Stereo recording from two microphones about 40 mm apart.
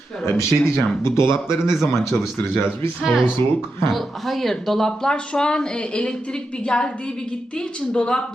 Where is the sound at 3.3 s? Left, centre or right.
Left.